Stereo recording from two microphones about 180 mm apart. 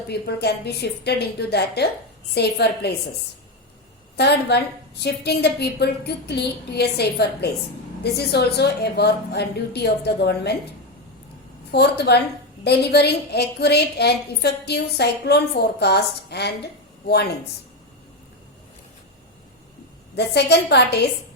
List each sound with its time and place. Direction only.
0.1 s a woman's voice: 65° left (ahead or behind)
4.2 s a woman's voice: 65° left (ahead or behind)
11.7 s a woman's voice: 65° left (ahead or behind)
20.1 s a woman's voice: 70° left (ahead or behind)